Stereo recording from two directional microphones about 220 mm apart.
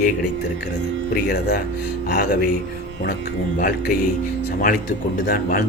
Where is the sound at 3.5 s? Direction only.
40° left (ahead or behind).